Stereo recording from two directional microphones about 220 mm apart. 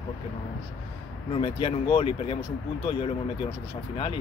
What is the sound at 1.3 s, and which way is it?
Speech, 25° left (ahead or behind).